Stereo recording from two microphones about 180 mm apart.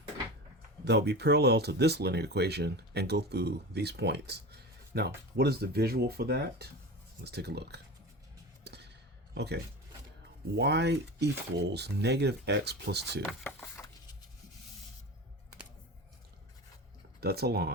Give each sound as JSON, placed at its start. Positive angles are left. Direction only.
{"t": 0.9, "sound": "speech", "side_deg": -70}
{"t": 8.6, "sound": "a sound", "side_deg": -70}
{"t": 9.3, "sound": "speech", "side_deg": -65}
{"t": 10.6, "sound": "speech", "side_deg": -70}
{"t": 13.4, "sound": "a sound", "side_deg": 15}
{"t": 17.2, "sound": "speech", "side_deg": -60}